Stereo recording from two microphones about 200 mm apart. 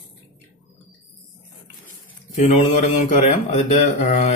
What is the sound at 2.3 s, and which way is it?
Mantra, 35° left (ahead or behind).